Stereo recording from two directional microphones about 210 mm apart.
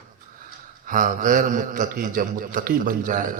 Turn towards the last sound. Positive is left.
turn(degrees=-40)  # may be behind; listen again after turning